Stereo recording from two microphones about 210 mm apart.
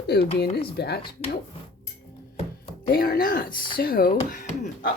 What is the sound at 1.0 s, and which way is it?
Speech, 30° left (ahead or behind).